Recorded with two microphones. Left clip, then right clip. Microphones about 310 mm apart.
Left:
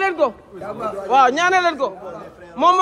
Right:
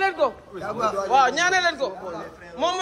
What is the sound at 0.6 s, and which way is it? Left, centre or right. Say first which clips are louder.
Speech: right 2 dB; centre.